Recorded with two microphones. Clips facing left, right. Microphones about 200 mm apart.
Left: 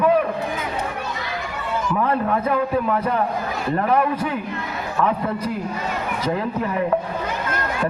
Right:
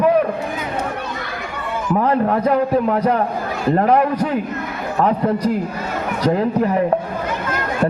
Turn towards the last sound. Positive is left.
turn(degrees=-40)  # may be behind; listen again after turning